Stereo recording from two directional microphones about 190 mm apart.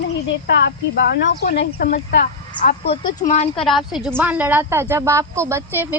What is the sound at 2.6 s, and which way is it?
Speech, 10° left (ahead or behind).